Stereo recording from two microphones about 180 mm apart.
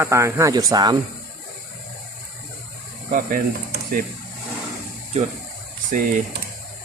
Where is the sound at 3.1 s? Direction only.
50° right (ahead or behind).